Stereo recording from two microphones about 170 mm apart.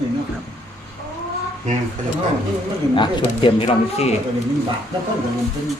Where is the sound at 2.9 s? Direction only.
30° left (ahead or behind).